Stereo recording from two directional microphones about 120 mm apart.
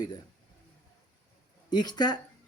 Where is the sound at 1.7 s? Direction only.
35° left (ahead or behind).